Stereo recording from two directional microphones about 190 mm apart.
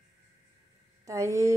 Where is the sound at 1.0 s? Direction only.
15° right (ahead or behind).